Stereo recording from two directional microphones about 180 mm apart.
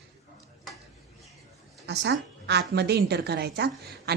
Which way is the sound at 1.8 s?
70° right (ahead or behind).